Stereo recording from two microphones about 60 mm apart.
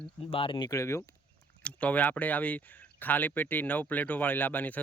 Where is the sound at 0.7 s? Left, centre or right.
Left.